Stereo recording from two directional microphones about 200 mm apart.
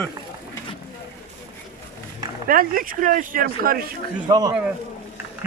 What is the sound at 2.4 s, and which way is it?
Speech, 45° right (ahead or behind).